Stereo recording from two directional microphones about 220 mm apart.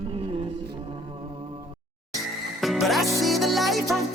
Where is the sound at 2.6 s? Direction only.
Centre (ahead or behind).